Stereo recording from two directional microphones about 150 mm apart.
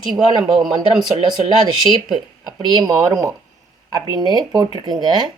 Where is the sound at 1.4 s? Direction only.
30° right (ahead or behind).